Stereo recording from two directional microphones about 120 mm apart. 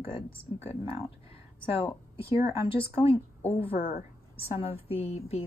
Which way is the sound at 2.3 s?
55° left (ahead or behind).